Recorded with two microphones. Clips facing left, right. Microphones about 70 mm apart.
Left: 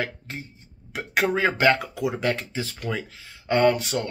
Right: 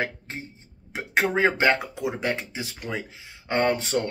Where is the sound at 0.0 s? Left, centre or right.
Right.